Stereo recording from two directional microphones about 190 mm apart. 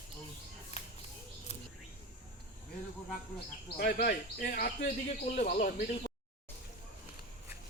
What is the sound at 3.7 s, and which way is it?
Speech, 55° left (ahead or behind).